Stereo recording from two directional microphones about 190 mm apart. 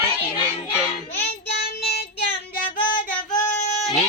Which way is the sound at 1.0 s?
50° left (ahead or behind).